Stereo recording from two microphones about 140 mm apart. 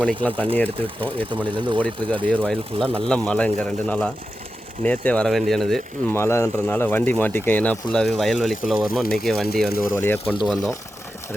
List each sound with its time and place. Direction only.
0.0 s speech: 10° left (ahead or behind)
1.5 s speech: 35° right (ahead or behind)
2.2 s speech: 10° left (ahead or behind)
2.7 s speech: 40° right (ahead or behind)
3.0 s speech: 5° left (ahead or behind)
6.1 s speech: 20° left (ahead or behind); by 9.5 s centre (ahead or behind)
9.6 s speech: 90° left
9.9 s speech: 15° left (ahead or behind)
10.4 s speech: centre (ahead or behind)